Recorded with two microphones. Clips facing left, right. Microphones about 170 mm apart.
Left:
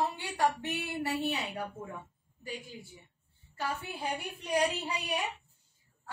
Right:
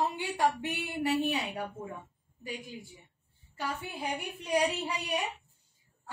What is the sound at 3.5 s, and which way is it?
A woman's voice, 15° right (ahead or behind).